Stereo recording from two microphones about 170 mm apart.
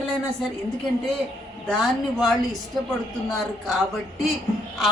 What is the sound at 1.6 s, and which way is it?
A woman's voice, centre (ahead or behind).